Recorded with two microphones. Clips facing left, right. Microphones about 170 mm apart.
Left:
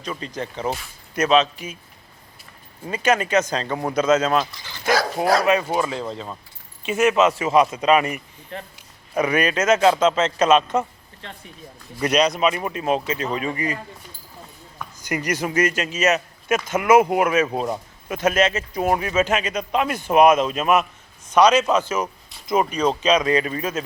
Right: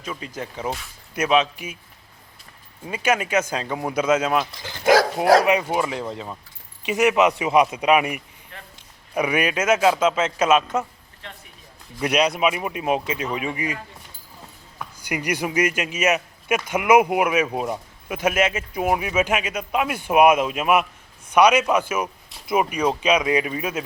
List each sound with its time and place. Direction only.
0.0 s speech: 5° right (ahead or behind)
2.8 s speech: 10° right (ahead or behind)
4.6 s dog: 50° right (ahead or behind)
5.4 s speech: 15° right (ahead or behind)
8.5 s a man's voice: 30° left (ahead or behind)
9.1 s speech: 10° right (ahead or behind)
11.9 s speech: 10° right (ahead or behind)
15.0 s speech: 10° right (ahead or behind)